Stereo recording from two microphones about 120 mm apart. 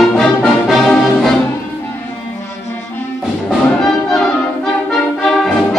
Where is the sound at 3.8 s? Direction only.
5° left (ahead or behind).